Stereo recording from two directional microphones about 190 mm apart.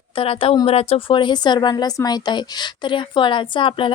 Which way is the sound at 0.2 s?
30° left (ahead or behind).